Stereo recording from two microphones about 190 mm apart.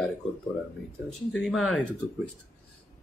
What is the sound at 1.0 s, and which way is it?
Speech, centre (ahead or behind).